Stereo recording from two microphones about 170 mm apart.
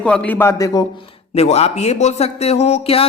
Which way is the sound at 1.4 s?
35° left (ahead or behind).